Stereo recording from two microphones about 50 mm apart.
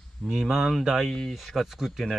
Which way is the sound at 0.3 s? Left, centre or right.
Centre.